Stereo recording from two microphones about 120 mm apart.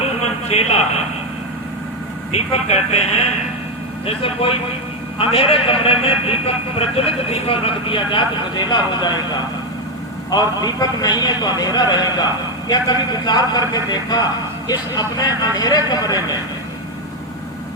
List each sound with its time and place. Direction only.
0.2 s a sound: 60° left (ahead or behind)
2.3 s a man's voice: 60° left (ahead or behind); by 9.1 s 35° left (ahead or behind)
10.3 s a man's voice: 35° left (ahead or behind)